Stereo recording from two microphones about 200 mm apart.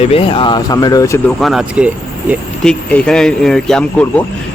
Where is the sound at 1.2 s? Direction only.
Centre (ahead or behind).